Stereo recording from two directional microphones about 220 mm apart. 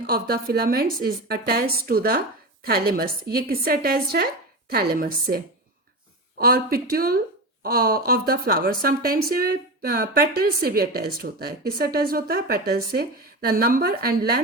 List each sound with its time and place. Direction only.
0.0 s speech: 45° right (ahead or behind)
6.4 s speech: 45° right (ahead or behind)